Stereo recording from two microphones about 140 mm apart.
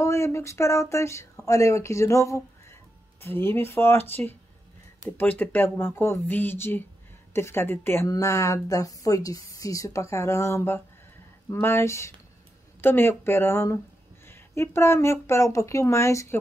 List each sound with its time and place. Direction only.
0.0 s speech: 20° left (ahead or behind)